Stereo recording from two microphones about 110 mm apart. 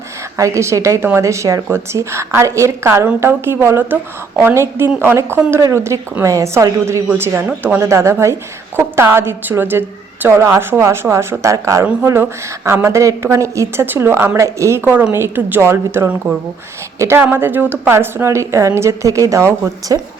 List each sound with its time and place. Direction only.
0.3 s a woman's voice: 30° right (ahead or behind)